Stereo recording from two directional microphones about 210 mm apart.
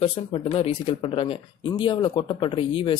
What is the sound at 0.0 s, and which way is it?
Speech, 25° left (ahead or behind).